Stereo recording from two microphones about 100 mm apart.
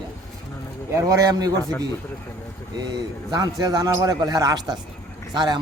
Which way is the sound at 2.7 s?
45° right (ahead or behind).